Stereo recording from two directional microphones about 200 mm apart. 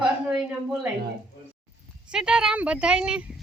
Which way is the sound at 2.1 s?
5° right (ahead or behind).